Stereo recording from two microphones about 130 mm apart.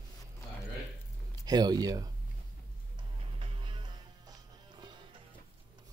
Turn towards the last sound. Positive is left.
turn(degrees=-35)  # may be behind; listen again after turning